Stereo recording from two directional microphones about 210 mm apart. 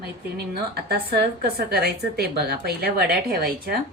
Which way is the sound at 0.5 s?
45° right (ahead or behind).